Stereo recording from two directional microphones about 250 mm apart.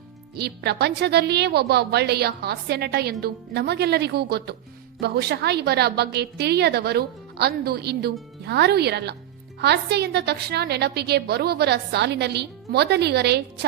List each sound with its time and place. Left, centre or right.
0.3 s a woman's voice: right